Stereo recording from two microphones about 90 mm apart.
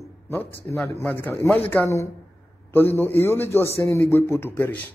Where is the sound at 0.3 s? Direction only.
30° left (ahead or behind).